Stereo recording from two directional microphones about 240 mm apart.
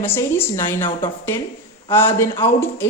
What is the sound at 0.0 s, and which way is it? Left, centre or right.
A woman's voice, centre.